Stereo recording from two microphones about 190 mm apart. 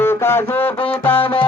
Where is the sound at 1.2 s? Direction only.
25° left (ahead or behind).